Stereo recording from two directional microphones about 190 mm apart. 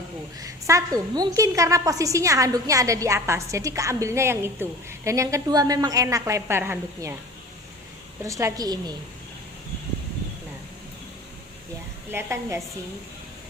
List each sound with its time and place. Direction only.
0.3 s a woman's voice: 15° right (ahead or behind)
8.2 s a woman's voice: 15° right (ahead or behind)
12.1 s a woman's voice: 15° right (ahead or behind)